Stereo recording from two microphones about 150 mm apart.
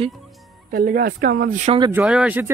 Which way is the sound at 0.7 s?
75° right (ahead or behind).